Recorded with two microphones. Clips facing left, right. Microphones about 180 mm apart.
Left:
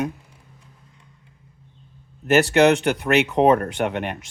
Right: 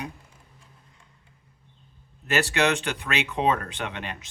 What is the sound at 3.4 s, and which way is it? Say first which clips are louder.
Speech: left 6 dB; 60° left (ahead or behind).